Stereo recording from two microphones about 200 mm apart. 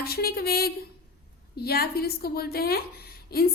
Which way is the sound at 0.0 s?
50° left (ahead or behind).